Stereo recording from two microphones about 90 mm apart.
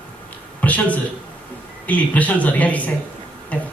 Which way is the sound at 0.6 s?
15° left (ahead or behind).